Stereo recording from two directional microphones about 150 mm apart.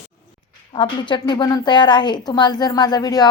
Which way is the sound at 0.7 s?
30° left (ahead or behind).